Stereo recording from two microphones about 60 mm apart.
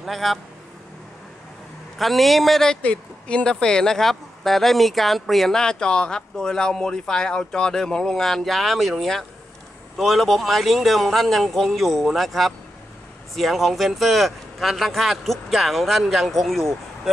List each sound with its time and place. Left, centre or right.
0.0 s speech: centre
2.0 s speech: centre
2.8 s speech: left; by 16.6 s centre